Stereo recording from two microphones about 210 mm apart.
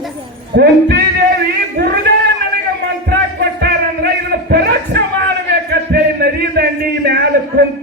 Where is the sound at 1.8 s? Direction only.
60° right (ahead or behind).